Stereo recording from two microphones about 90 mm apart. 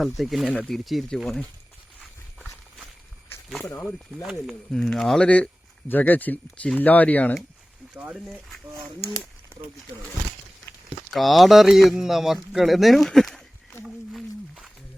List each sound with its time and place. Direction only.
0.0 s speech: centre (ahead or behind)
0.4 s speech: 10° left (ahead or behind)
4.2 s speech: 10° right (ahead or behind)
4.7 s speech: 10° left (ahead or behind)
11.1 s speech: centre (ahead or behind)
13.8 s a sound: 5° right (ahead or behind)